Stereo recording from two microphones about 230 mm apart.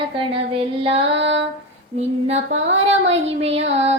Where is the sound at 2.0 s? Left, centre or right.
Right.